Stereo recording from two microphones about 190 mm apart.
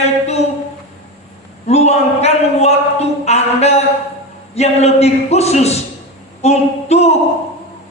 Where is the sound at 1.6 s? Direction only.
35° left (ahead or behind).